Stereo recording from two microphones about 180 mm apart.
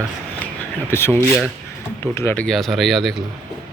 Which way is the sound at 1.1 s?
5° right (ahead or behind).